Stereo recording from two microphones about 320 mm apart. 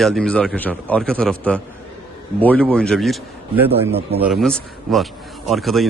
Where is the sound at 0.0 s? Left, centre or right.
Centre.